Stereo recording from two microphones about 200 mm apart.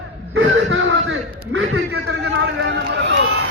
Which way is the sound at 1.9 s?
55° right (ahead or behind).